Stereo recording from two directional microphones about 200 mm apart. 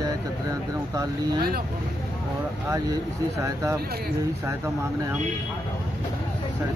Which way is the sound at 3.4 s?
15° right (ahead or behind).